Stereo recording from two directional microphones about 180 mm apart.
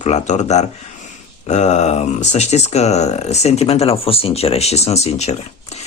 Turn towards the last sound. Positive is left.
turn(degrees=35)  # may be behind; listen again after turning